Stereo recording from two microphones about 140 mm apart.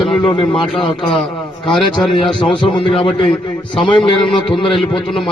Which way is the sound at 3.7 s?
5° left (ahead or behind).